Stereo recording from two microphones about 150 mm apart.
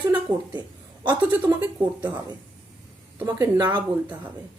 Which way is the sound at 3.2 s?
15° right (ahead or behind).